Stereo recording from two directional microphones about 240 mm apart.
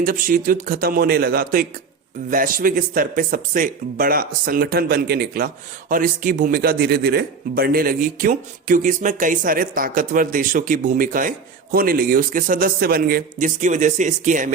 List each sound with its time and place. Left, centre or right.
0.0 s a man's voice: right